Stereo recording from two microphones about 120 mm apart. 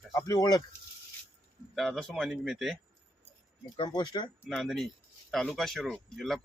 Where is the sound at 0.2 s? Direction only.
30° left (ahead or behind).